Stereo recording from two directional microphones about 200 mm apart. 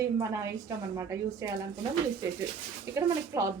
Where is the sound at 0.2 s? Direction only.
15° right (ahead or behind).